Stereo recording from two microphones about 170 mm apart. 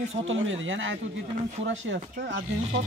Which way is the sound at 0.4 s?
90° right.